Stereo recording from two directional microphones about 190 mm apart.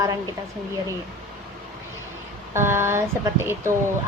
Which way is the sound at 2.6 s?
15° right (ahead or behind).